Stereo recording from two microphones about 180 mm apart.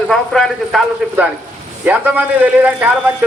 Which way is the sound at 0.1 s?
Centre (ahead or behind).